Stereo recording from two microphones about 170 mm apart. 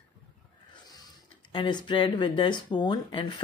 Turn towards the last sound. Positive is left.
turn(degrees=25)  # may be behind; listen again after turning